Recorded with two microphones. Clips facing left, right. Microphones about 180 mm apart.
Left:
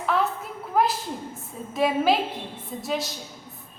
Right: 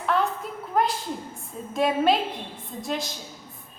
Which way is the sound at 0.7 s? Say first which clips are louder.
Left 2 dB; 5° left (ahead or behind).